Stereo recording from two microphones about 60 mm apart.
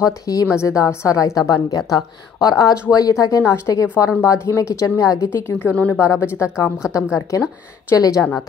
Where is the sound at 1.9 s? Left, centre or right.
Left.